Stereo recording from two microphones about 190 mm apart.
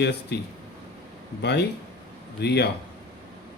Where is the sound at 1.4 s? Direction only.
60° left (ahead or behind).